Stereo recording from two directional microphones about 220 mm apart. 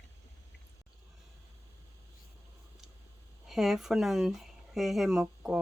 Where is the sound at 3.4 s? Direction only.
Centre (ahead or behind).